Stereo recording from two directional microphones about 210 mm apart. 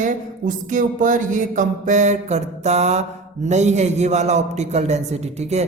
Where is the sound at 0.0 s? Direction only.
40° right (ahead or behind).